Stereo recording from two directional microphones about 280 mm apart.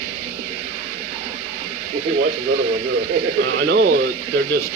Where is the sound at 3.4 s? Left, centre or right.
Right.